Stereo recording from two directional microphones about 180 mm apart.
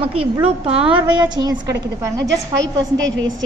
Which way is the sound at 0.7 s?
30° right (ahead or behind).